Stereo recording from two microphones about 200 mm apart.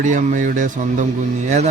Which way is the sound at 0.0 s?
40° right (ahead or behind).